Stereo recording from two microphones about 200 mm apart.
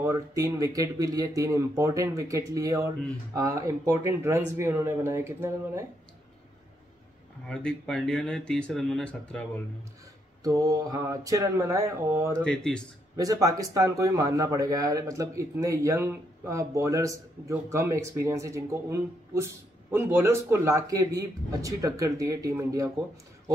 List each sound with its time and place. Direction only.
0.0 s speech: 15° right (ahead or behind)
7.4 s speech: 5° left (ahead or behind)
10.4 s speech: 15° right (ahead or behind)
12.4 s speech: 5° left (ahead or behind)
13.1 s speech: 20° right (ahead or behind)